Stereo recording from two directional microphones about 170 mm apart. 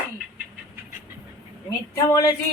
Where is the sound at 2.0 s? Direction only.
20° left (ahead or behind).